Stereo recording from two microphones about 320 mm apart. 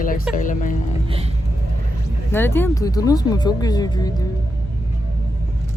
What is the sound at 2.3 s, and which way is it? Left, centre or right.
Speech, centre.